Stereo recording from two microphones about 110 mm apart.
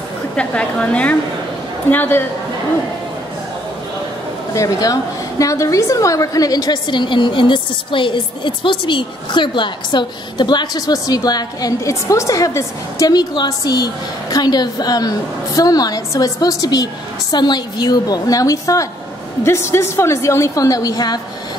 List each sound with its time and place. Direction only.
0.4 s a woman's voice: 10° left (ahead or behind)
4.6 s a woman's voice: 35° left (ahead or behind)